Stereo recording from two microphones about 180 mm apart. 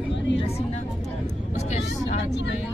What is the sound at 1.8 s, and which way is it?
Speech, 75° left (ahead or behind).